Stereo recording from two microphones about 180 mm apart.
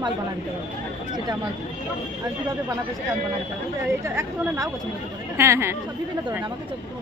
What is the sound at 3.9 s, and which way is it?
Speech, 15° right (ahead or behind).